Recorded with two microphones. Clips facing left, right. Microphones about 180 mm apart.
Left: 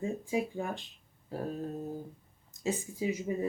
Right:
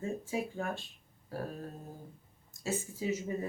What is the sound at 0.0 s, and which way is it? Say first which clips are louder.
Speech: left 3 dB; 15° left (ahead or behind).